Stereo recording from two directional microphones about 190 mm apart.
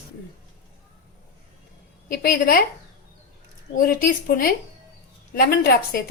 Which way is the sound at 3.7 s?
50° left (ahead or behind).